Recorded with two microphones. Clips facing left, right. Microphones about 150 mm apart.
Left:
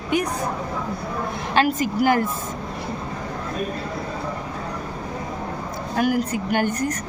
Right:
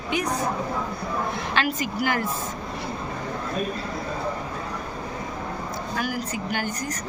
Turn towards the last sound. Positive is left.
turn(degrees=55)  # may be behind; listen again after turning